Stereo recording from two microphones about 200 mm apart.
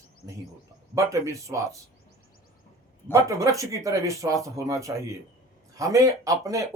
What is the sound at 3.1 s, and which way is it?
A man's voice, 15° right (ahead or behind).